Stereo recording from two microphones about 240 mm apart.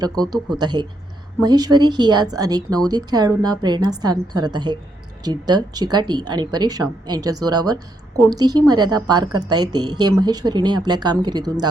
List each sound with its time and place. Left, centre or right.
0.4 s a woman's voice: centre